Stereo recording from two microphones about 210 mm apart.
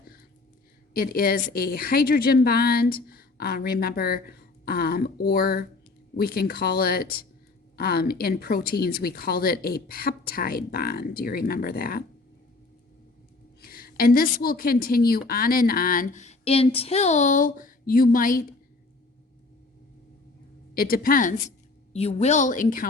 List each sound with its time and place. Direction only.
0.9 s a woman's voice: 45° left (ahead or behind)
13.6 s a woman's voice: 45° left (ahead or behind)
20.7 s a woman's voice: 45° left (ahead or behind)